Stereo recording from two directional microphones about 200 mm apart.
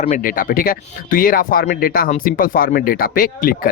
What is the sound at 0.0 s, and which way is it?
Speech, 40° left (ahead or behind).